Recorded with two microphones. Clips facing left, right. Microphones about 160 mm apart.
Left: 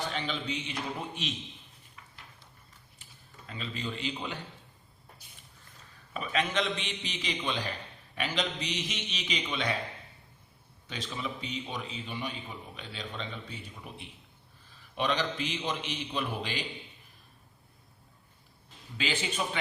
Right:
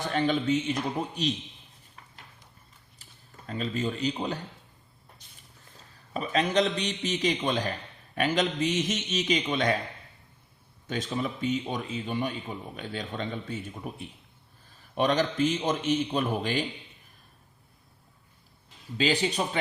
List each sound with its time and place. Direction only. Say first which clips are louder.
0.1 s a man's voice: right 10 dB; 45° right (ahead or behind)
2.0 s a sound: right 2 dB; 35° right (ahead or behind)
3.0 s speech: right 2 dB; 45° right (ahead or behind)
6.1 s a man's voice: right 5 dB; 40° right (ahead or behind)
10.8 s a man's voice: right 7 dB; 45° right (ahead or behind)
18.9 s a man's voice: right 7 dB; 40° right (ahead or behind)